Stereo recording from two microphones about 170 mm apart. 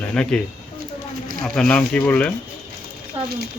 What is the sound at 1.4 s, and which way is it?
Speech, 5° left (ahead or behind).